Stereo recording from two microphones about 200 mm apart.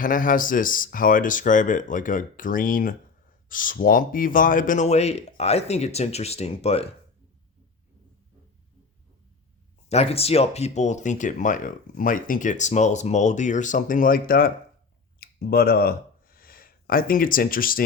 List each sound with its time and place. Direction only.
0.0 s speech: 45° left (ahead or behind)
9.9 s speech: 30° left (ahead or behind)